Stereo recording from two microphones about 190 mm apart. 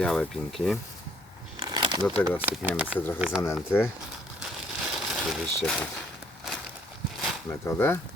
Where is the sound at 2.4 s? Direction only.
10° right (ahead or behind).